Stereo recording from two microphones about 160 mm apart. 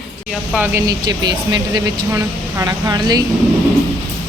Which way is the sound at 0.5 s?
10° right (ahead or behind).